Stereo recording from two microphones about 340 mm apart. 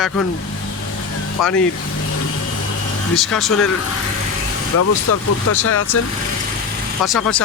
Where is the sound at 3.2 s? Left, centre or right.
Centre.